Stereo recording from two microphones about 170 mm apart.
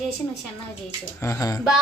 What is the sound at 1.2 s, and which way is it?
Speech, 20° left (ahead or behind).